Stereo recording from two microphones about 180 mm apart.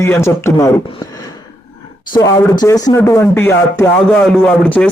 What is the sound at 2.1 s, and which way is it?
Speech, 20° left (ahead or behind).